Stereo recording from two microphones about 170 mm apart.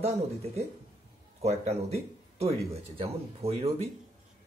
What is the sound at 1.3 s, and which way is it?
Speech, 40° right (ahead or behind).